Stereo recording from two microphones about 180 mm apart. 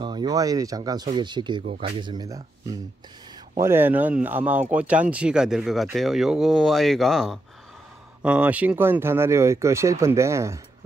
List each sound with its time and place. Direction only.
0.0 s speech: 25° right (ahead or behind)